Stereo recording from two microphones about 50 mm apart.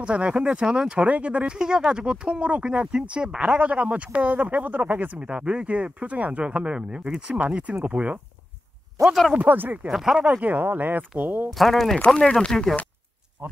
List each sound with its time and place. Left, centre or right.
0.0 s speech: right
5.2 s speech: centre
7.6 s speech: right
9.3 s speech: right
9.8 s speech: centre
10.2 s speech: right
11.5 s speech: centre
12.3 s speech: centre
13.4 s speech: right